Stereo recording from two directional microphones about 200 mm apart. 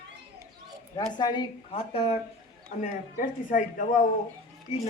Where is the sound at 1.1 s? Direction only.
25° left (ahead or behind).